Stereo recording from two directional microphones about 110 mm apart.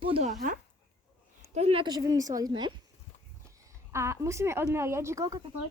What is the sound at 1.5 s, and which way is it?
Speech, 65° right (ahead or behind).